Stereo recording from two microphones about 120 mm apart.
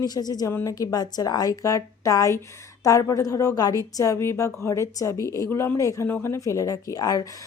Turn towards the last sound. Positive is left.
turn(degrees=30)  # may be behind; listen again after turning